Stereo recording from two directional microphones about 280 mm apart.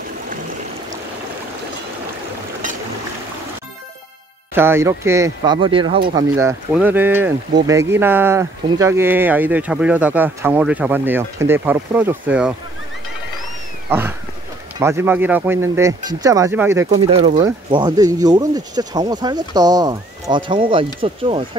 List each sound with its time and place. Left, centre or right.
4.6 s speech: centre
13.8 s speech: centre
17.1 s speech: right